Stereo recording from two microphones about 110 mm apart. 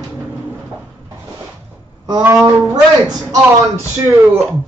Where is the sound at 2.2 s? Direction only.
30° right (ahead or behind).